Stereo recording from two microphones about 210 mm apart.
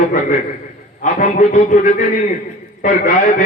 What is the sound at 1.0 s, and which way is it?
A man's voice, 40° left (ahead or behind).